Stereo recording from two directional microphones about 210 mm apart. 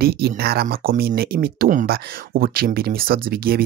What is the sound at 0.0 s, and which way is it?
Speech, 45° right (ahead or behind).